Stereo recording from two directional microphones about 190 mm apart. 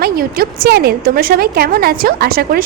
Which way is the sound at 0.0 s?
50° right (ahead or behind).